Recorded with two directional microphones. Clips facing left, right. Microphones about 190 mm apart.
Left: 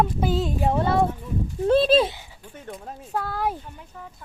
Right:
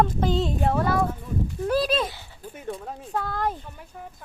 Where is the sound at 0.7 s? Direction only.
25° left (ahead or behind).